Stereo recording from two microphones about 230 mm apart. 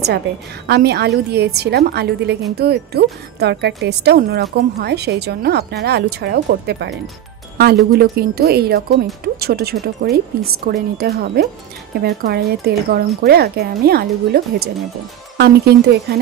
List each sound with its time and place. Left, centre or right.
0.7 s a woman's voice: right